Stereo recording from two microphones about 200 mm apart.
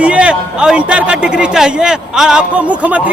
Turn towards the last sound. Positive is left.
turn(degrees=-5)  # may be behind; listen again after turning